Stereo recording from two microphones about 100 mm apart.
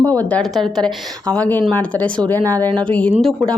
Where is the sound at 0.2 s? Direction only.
15° left (ahead or behind).